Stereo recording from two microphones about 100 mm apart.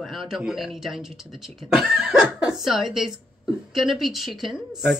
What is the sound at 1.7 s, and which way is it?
Neigh, 5° right (ahead or behind).